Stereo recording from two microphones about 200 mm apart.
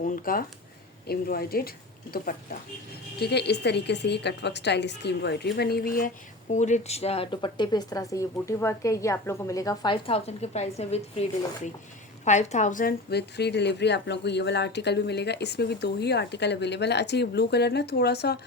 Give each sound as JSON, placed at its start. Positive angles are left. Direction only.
{"t": 0.0, "sound": "a woman's voice", "side_deg": 45}
{"t": 6.5, "sound": "a woman's voice", "side_deg": 35}